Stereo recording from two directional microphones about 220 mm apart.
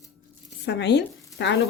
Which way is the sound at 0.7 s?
50° left (ahead or behind).